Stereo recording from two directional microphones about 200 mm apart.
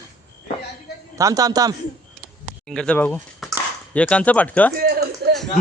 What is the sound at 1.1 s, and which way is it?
Speech, 15° right (ahead or behind).